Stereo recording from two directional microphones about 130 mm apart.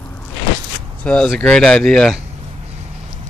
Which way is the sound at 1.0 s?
5° left (ahead or behind).